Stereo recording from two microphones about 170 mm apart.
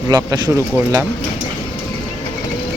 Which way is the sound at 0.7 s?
15° right (ahead or behind).